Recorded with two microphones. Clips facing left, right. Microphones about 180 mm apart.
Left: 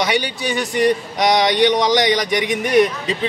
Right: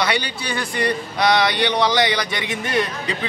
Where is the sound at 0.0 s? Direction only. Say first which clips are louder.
Left 3 dB; 20° left (ahead or behind).